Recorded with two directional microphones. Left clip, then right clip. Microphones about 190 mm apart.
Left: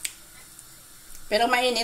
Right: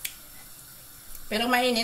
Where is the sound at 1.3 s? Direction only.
35° left (ahead or behind).